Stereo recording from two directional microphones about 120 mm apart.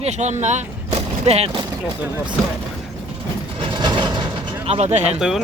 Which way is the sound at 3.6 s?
40° right (ahead or behind).